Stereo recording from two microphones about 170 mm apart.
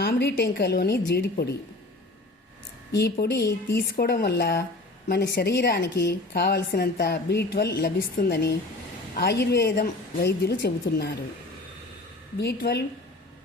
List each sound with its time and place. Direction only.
0.0 s a woman's voice: 65° left (ahead or behind)
2.9 s a woman's voice: 70° left (ahead or behind)
12.4 s a woman's voice: 85° left